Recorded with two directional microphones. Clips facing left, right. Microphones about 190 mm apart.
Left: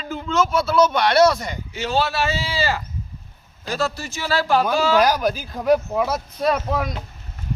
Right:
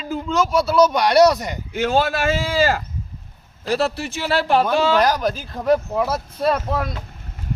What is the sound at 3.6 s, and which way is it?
A man's voice, 30° right (ahead or behind).